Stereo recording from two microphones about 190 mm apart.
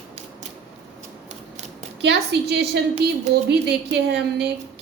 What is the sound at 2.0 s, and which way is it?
A woman's voice, 60° right (ahead or behind).